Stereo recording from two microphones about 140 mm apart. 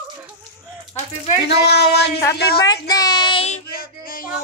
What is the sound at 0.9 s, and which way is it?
Speech, 60° left (ahead or behind).